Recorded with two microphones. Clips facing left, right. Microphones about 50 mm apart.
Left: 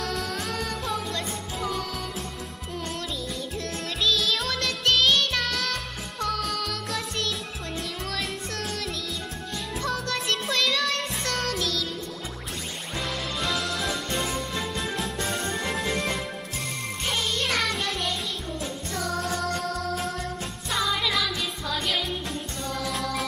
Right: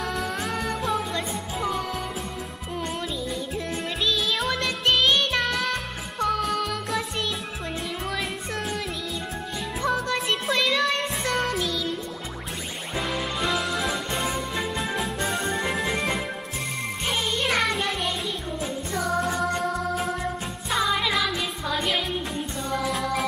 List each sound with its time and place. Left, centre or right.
0.1 s music: centre
3.5 s music: centre
12.9 s music: centre